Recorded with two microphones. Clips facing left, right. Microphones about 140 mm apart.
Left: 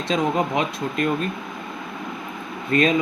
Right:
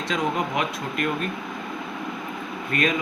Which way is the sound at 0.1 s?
25° left (ahead or behind).